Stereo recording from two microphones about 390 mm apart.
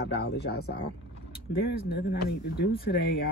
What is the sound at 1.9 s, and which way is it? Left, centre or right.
Speech, left.